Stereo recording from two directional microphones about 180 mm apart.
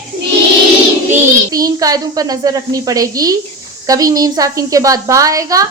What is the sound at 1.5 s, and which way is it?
A woman's voice, 20° right (ahead or behind).